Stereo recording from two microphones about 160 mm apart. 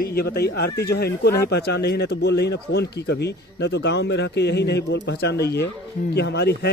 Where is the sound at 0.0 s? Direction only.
75° left (ahead or behind).